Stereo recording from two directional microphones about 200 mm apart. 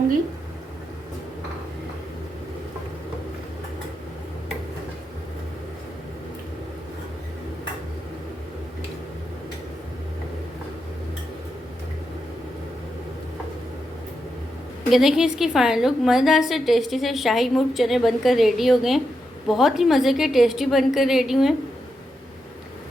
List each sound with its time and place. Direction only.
14.8 s a woman's voice: centre (ahead or behind)